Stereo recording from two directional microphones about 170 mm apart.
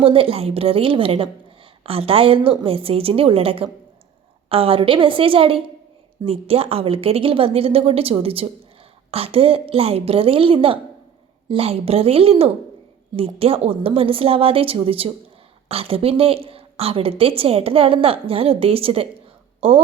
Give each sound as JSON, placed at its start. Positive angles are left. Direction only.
{"t": 0.0, "sound": "a woman's voice", "side_deg": -35}